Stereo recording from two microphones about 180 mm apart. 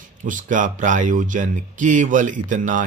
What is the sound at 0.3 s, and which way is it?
Speech, 45° right (ahead or behind).